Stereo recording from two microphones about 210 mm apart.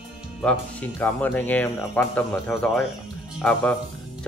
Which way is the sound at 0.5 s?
5° left (ahead or behind).